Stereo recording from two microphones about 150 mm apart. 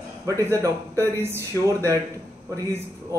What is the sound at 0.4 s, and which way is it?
Speech, 20° right (ahead or behind).